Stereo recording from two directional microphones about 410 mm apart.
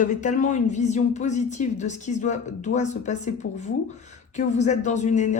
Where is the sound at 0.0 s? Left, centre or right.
Centre.